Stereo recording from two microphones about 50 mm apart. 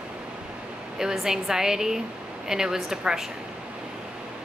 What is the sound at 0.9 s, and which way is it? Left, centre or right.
Speech, centre.